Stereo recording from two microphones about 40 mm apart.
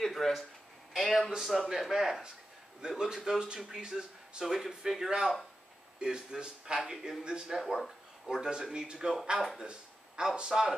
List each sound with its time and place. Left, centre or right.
0.0 s a sound: centre
0.9 s speech: centre
1.7 s speech: centre
7.4 s speech: centre
8.3 s speech: centre